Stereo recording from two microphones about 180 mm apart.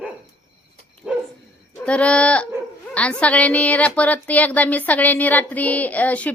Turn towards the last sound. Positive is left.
turn(degrees=10)  # may be behind; listen again after turning